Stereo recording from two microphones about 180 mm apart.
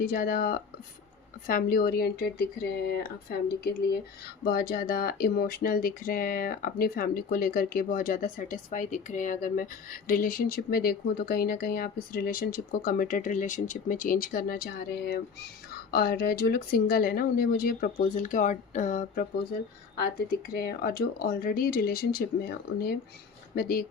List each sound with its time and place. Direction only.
0.0 s speech: 55° left (ahead or behind)
20.1 s speech: 60° left (ahead or behind)